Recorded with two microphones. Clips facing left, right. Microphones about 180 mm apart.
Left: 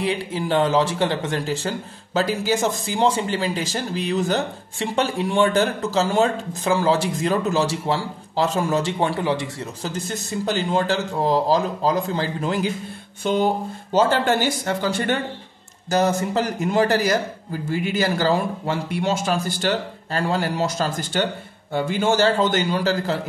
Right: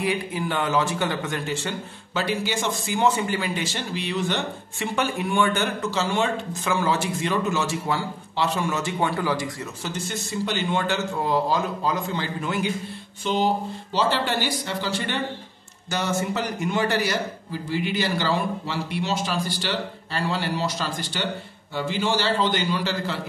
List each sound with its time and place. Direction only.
0.1 s a man's voice: 30° left (ahead or behind)
9.8 s speech: 40° left (ahead or behind)
13.2 s a man's voice: 55° left (ahead or behind)